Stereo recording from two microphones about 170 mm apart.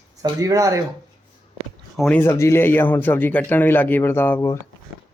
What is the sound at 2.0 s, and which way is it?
A man's voice, 10° left (ahead or behind).